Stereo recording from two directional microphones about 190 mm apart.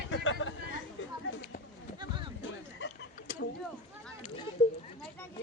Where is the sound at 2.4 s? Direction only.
85° left.